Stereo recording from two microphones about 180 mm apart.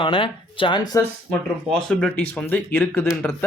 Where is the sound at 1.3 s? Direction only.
5° left (ahead or behind).